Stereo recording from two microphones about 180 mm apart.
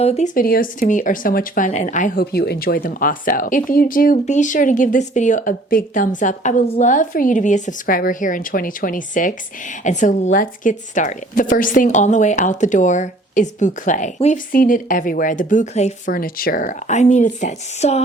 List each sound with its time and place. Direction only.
0.0 s speech: 35° left (ahead or behind)
0.3 s speech: 55° left (ahead or behind); by 18.0 s 35° left (ahead or behind)